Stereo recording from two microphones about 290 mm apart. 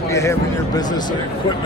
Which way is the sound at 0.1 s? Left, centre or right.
Centre.